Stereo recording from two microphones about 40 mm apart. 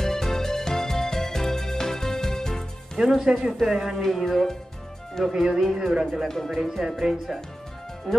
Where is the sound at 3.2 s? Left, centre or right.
Centre.